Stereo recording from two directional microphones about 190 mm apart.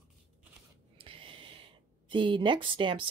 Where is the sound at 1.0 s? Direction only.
30° right (ahead or behind).